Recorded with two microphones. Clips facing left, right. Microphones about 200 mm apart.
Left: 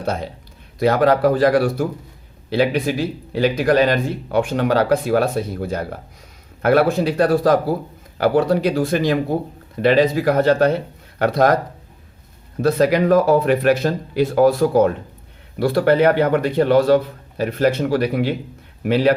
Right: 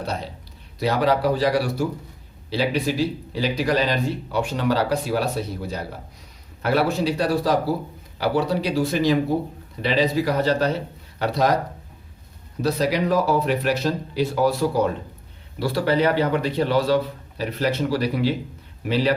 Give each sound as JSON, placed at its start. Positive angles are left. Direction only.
{"t": 0.0, "sound": "speech", "side_deg": 50}
{"t": 12.6, "sound": "speech", "side_deg": 55}